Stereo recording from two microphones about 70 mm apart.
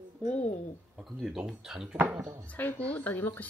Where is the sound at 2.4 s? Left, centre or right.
Left.